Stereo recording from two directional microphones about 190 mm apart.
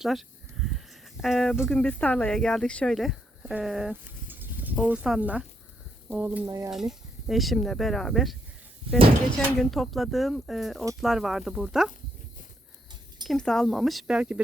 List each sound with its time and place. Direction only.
0.0 s a sound: centre (ahead or behind)
1.7 s speech: 5° left (ahead or behind); by 6.7 s 10° right (ahead or behind)
6.7 s speech: centre (ahead or behind)
9.6 s speech: centre (ahead or behind)
13.2 s speech: 5° left (ahead or behind)